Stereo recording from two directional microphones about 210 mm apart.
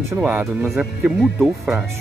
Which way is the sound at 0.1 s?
5° right (ahead or behind).